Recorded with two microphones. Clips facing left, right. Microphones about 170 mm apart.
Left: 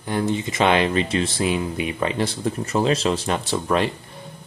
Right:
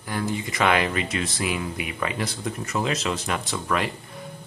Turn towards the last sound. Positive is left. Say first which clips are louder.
# left 5 dB
turn(degrees=30)  # may be behind; listen again after turning